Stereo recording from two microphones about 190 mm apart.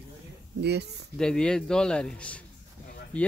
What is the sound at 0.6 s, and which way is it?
Speech, 60° right (ahead or behind).